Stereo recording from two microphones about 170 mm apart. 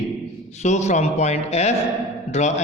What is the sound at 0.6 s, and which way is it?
A man's voice, 45° left (ahead or behind).